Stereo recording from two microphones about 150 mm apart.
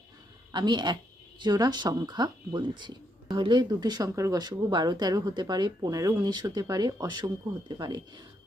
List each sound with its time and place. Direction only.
0.5 s speech: 30° right (ahead or behind)